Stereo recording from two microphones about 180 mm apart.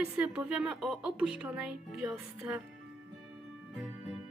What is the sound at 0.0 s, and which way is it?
A woman's voice, 5° right (ahead or behind).